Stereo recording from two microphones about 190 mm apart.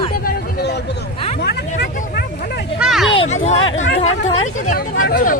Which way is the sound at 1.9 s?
55° left (ahead or behind).